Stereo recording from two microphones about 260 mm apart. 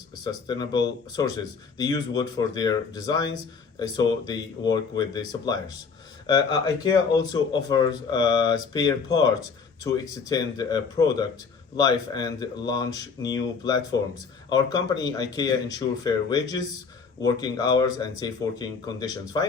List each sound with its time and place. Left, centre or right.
0.3 s speech: centre